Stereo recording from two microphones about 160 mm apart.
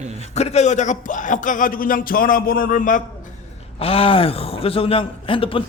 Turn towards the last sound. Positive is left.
turn(degrees=35)  # may be behind; listen again after turning